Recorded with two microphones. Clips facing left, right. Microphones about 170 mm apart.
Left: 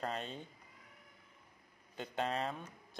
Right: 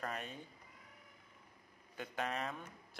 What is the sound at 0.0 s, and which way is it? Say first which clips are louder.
Cat: left 3 dB; 25° left (ahead or behind).